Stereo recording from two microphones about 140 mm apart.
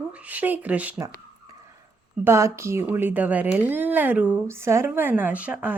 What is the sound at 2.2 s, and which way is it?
Speech, 20° right (ahead or behind).